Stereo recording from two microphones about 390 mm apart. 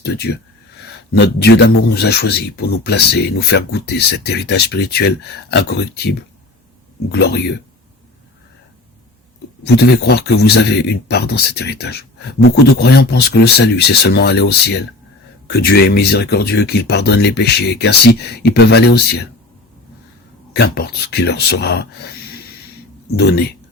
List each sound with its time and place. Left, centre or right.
0.0 s speech: left
9.6 s speech: left
20.5 s speech: left
23.1 s speech: left